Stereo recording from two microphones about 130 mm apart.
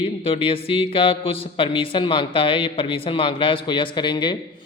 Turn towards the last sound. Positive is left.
turn(degrees=35)  # may be behind; listen again after turning